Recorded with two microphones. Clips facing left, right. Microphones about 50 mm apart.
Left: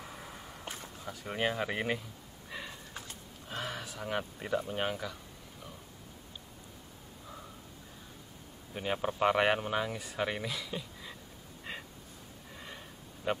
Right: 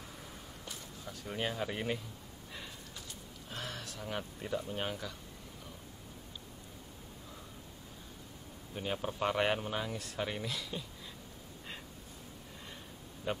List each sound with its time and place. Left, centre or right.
0.0 s a sound: left
1.6 s speech: left
3.4 s speech: centre
8.7 s speech: left
10.4 s speech: centre
13.3 s speech: centre